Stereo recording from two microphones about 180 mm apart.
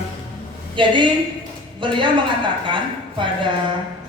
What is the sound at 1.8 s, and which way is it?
Speech, 25° right (ahead or behind).